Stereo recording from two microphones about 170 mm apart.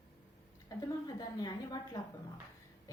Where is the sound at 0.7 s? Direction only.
20° left (ahead or behind).